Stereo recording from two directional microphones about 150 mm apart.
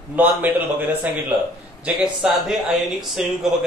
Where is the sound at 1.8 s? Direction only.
5° right (ahead or behind).